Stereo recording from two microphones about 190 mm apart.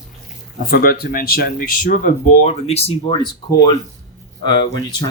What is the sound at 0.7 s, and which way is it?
Speech, 55° left (ahead or behind).